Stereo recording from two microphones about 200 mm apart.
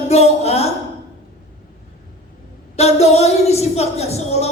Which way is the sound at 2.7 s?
30° left (ahead or behind).